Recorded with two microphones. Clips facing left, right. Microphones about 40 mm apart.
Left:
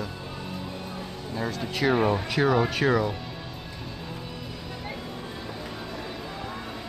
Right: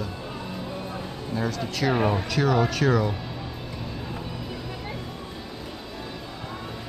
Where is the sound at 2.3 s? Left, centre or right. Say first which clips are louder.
Even; centre.